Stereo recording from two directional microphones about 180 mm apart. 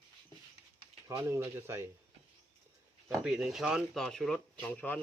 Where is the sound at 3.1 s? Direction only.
5° right (ahead or behind).